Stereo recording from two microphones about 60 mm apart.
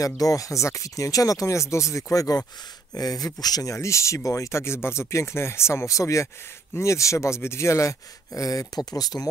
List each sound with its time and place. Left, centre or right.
0.0 s speech: left
2.9 s speech: left
3.7 s speech: left
8.4 s speech: left